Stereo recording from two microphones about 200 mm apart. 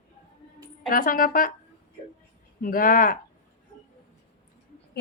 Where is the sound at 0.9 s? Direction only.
45° left (ahead or behind).